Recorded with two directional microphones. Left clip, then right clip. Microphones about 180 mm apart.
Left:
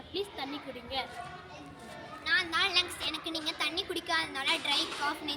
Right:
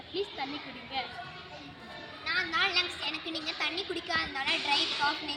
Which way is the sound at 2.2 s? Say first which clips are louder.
Left 1 dB; 40° left (ahead or behind).